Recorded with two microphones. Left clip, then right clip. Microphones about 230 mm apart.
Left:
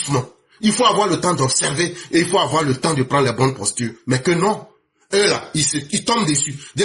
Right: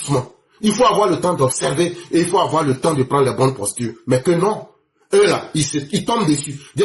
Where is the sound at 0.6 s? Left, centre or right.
Left.